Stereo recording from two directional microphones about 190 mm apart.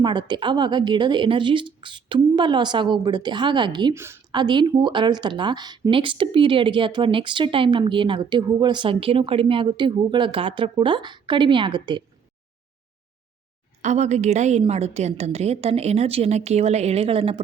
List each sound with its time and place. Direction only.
0.0 s a woman's voice: 25° right (ahead or behind)
13.8 s a woman's voice: 35° right (ahead or behind)